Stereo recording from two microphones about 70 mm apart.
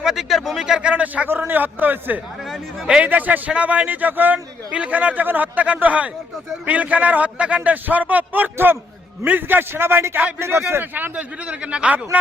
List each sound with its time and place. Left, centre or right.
0.0 s speech: centre
0.6 s a man's voice: centre
2.8 s a man's voice: centre
3.1 s a man's voice: right